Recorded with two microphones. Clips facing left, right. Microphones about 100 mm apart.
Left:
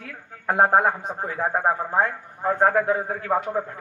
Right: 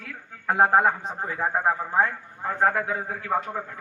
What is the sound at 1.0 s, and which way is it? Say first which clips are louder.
Speech: left 2 dB; 10° left (ahead or behind).